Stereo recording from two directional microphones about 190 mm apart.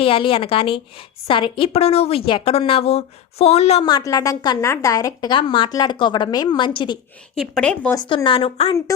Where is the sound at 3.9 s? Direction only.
20° left (ahead or behind).